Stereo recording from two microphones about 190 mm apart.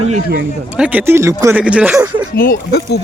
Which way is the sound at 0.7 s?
10° right (ahead or behind).